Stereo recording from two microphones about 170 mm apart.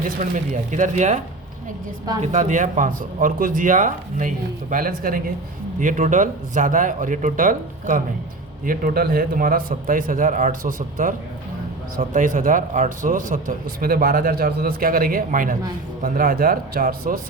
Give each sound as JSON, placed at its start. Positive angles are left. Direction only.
{"t": 0.3, "sound": "speech", "side_deg": -45}
{"t": 2.2, "sound": "a man's voice", "side_deg": -45}